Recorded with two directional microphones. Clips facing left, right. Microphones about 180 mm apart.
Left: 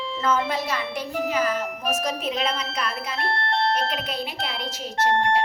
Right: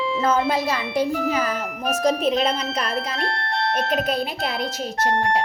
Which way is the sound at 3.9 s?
45° right (ahead or behind).